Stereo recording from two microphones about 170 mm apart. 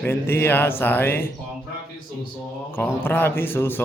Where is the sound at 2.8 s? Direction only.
10° left (ahead or behind).